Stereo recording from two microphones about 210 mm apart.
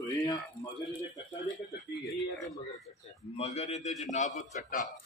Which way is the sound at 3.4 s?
30° left (ahead or behind).